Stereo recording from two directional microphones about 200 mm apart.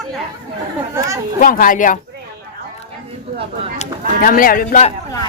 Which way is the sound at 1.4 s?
45° left (ahead or behind).